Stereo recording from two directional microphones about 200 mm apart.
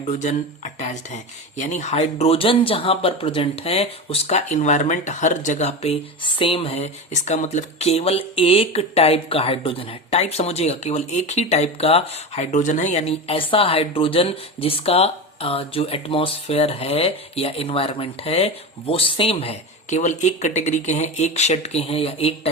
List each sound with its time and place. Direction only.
0.0 s speech: 35° left (ahead or behind)